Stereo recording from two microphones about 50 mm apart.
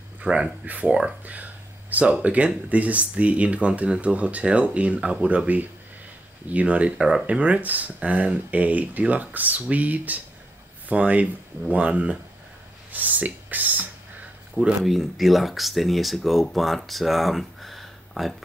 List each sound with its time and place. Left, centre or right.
0.2 s speech: centre
0.7 s speech: right
1.2 s a sound: right
2.2 s speech: right
14.8 s speech: centre